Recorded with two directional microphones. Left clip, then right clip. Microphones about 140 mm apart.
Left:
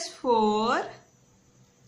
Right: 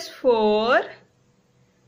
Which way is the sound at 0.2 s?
20° right (ahead or behind).